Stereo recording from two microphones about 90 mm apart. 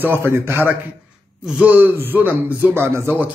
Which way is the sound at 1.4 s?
15° right (ahead or behind).